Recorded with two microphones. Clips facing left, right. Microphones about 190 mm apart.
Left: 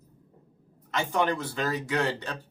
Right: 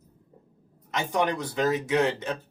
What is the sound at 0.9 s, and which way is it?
Speech, 15° right (ahead or behind).